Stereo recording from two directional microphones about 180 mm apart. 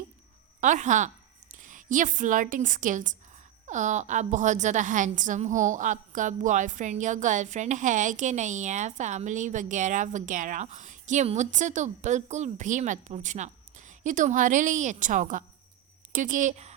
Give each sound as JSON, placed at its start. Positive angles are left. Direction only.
{"t": 0.6, "sound": "a woman's voice", "side_deg": -45}